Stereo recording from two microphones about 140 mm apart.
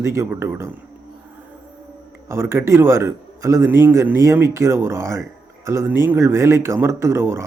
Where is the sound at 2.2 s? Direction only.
20° right (ahead or behind).